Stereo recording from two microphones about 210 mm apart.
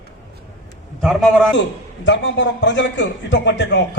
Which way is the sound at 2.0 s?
60° left (ahead or behind).